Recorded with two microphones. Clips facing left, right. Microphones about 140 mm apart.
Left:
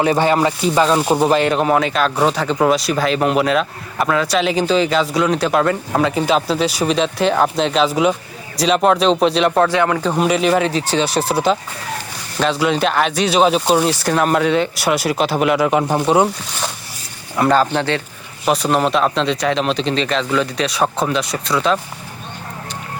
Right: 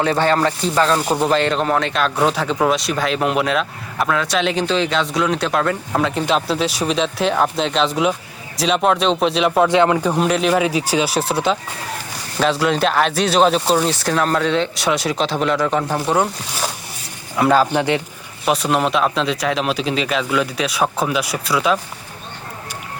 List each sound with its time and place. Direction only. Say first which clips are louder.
0.0 s a sound: left 2 dB; 10° left (ahead or behind)
0.7 s speech: left 3 dB; 15° left (ahead or behind)
9.6 s speech: right 2 dB; 20° right (ahead or behind)
10.1 s speech: left 1 dB; centre (ahead or behind)
10.7 s speech: even; 10° right (ahead or behind); by 15.8 s 10° left (ahead or behind)
15.8 s speech: left 4 dB; 20° left (ahead or behind)
17.3 s speech: even; 5° right (ahead or behind)
18.4 s speech: left 2 dB; centre (ahead or behind)